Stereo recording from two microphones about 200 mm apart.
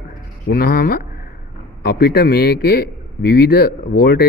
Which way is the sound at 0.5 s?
50° left (ahead or behind).